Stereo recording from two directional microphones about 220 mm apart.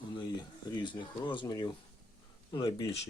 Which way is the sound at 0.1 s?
20° left (ahead or behind).